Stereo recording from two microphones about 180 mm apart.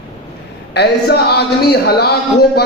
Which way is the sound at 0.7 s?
65° left (ahead or behind).